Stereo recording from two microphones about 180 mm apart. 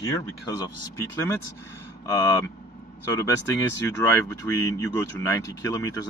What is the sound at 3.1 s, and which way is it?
Speech, 15° left (ahead or behind).